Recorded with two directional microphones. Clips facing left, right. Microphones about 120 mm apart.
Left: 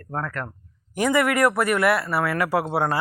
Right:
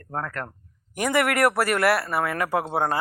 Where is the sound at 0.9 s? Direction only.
70° right (ahead or behind).